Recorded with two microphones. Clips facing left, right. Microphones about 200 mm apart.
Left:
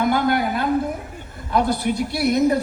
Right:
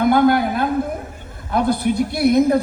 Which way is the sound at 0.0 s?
55° right (ahead or behind).